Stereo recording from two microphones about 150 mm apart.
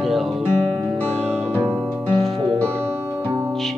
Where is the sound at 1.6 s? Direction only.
10° right (ahead or behind).